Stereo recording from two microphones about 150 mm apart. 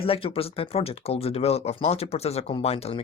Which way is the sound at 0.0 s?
40° left (ahead or behind).